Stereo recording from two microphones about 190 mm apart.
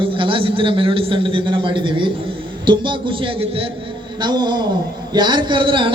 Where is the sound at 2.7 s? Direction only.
25° right (ahead or behind).